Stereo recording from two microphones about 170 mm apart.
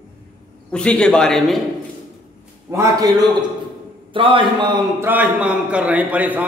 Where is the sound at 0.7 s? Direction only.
5° left (ahead or behind).